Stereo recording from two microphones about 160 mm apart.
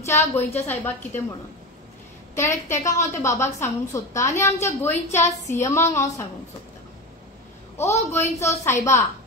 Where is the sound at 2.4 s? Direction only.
15° left (ahead or behind).